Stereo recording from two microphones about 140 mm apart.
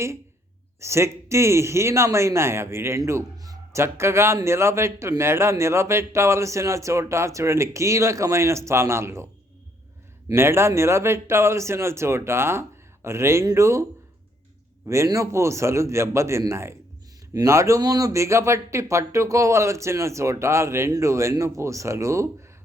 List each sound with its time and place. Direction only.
0.8 s speech: 20° right (ahead or behind)
10.2 s speech: 20° right (ahead or behind)
14.8 s speech: 20° right (ahead or behind)